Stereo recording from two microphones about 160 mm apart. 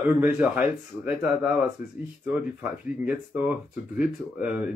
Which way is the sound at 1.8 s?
60° left (ahead or behind).